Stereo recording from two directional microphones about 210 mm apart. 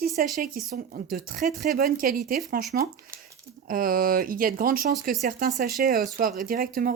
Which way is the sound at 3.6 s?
40° right (ahead or behind).